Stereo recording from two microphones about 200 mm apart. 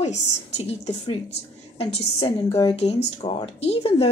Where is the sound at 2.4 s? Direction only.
20° left (ahead or behind).